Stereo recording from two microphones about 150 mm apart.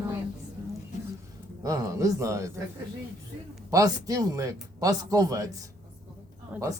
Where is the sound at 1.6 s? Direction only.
20° right (ahead or behind).